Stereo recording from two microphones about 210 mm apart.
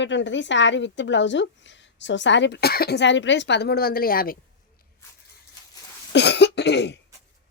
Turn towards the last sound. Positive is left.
turn(degrees=55)  # may be behind; listen again after turning